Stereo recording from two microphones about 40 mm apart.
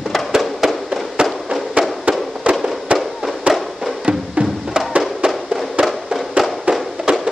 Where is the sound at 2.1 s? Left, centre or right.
Right.